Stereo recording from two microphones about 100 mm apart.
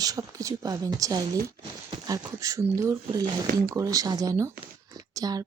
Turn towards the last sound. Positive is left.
turn(degrees=-40)  # may be behind; listen again after turning